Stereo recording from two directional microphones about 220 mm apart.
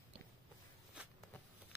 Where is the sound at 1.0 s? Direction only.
5° right (ahead or behind).